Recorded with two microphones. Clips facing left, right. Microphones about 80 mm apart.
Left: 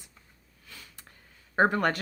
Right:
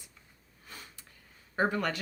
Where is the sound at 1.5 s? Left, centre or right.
Left.